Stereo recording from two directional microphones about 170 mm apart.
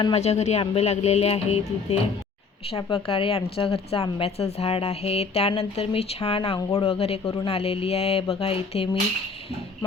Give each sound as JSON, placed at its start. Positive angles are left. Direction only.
{"t": 0.0, "sound": "speech", "side_deg": 35}